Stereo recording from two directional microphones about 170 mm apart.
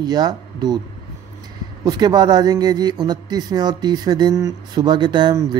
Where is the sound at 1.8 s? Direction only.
25° right (ahead or behind).